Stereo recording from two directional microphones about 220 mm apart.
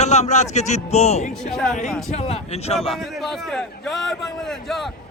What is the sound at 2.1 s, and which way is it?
Speech, 30° left (ahead or behind).